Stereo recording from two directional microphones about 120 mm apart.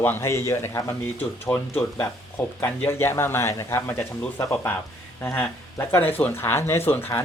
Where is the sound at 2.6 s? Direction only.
20° left (ahead or behind).